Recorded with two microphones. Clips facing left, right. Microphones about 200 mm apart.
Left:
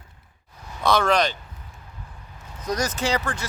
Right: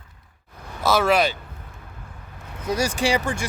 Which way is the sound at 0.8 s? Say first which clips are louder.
Right 1 dB; 5° right (ahead or behind).